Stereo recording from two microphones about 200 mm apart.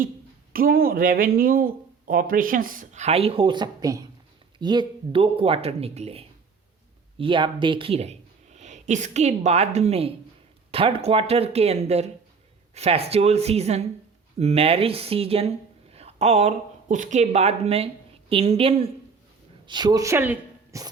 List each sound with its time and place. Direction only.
0.5 s a woman's voice: 45° right (ahead or behind); by 20.8 s 10° right (ahead or behind)